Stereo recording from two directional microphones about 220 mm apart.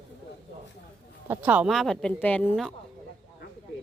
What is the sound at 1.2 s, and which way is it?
A woman's voice, 10° right (ahead or behind).